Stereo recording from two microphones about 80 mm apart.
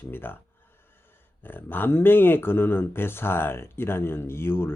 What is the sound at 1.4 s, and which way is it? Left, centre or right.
Speech, left.